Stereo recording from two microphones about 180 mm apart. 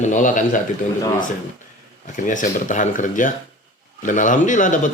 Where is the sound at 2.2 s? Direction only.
45° left (ahead or behind).